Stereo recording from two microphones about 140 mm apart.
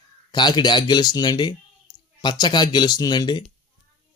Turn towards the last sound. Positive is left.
turn(degrees=30)  # may be behind; listen again after turning